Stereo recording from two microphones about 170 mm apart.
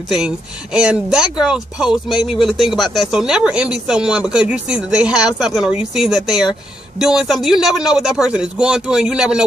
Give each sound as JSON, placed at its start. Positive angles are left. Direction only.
{"t": 0.7, "sound": "speech", "side_deg": -5}